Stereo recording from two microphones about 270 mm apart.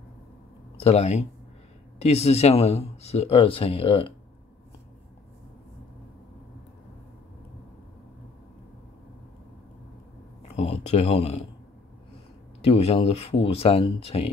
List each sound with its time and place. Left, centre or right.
0.7 s speech: left
10.5 s speech: left
12.6 s speech: left